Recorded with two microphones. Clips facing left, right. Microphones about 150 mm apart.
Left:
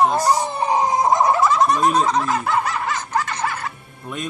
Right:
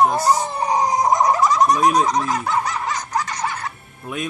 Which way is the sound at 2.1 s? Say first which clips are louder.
Left 1 dB; 30° left (ahead or behind).